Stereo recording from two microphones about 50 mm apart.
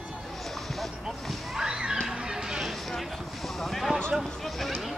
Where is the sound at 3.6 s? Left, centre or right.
Centre.